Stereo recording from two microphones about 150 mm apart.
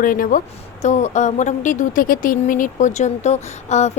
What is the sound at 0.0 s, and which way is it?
A woman's voice, 65° left (ahead or behind).